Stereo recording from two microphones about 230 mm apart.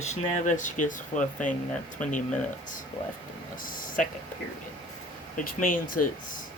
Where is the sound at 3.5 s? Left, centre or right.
Left.